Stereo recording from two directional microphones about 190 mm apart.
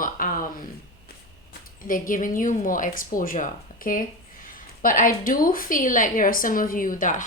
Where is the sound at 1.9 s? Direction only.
45° left (ahead or behind).